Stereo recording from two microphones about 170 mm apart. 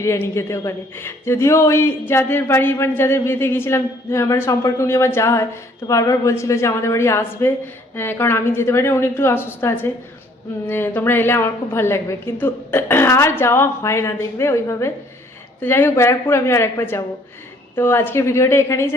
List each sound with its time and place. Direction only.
0.0 s speech: 15° left (ahead or behind)